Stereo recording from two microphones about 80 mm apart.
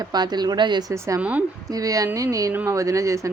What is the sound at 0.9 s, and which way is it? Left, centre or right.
Speech, right.